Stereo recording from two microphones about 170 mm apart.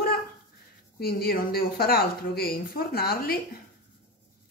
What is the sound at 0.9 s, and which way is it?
Speech, 65° left (ahead or behind).